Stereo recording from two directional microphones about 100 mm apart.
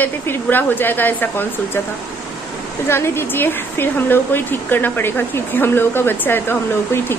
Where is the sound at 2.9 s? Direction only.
25° left (ahead or behind).